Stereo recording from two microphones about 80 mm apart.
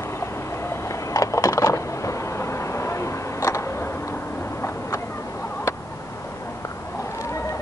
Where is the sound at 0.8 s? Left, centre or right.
Left.